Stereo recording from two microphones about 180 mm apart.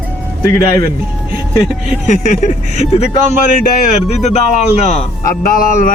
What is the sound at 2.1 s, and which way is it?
Speech, 45° left (ahead or behind).